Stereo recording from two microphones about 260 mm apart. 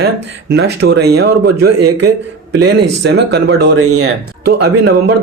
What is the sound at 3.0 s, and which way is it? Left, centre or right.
A man's voice, right.